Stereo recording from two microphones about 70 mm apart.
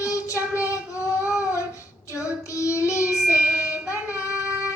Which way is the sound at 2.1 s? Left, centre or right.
Left.